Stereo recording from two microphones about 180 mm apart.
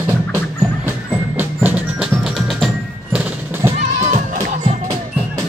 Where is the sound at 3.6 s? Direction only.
15° right (ahead or behind).